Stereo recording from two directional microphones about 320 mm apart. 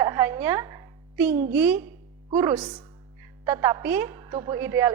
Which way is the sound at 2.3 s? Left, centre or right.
Centre.